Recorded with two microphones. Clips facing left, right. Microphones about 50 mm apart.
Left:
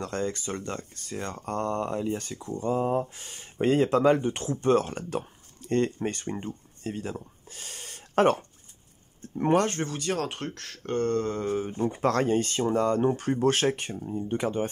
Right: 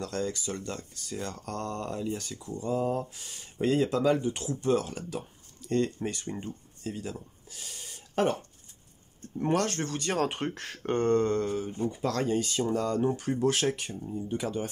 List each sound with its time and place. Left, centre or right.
0.0 s speech: left
9.4 s speech: left
9.8 s speech: centre
11.2 s speech: centre
11.8 s speech: left